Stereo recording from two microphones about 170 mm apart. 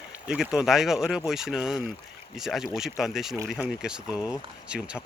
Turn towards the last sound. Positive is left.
turn(degrees=-5)  # may be behind; listen again after turning